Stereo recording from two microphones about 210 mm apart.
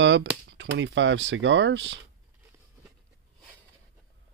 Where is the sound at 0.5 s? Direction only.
60° right (ahead or behind).